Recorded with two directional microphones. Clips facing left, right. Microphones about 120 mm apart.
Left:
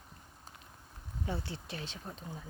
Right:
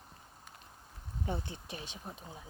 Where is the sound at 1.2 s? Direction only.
20° right (ahead or behind).